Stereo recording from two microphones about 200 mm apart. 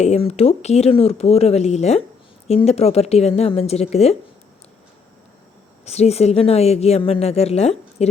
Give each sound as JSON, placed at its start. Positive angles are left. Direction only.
{"t": 0.0, "sound": "speech", "side_deg": 30}
{"t": 5.8, "sound": "speech", "side_deg": 30}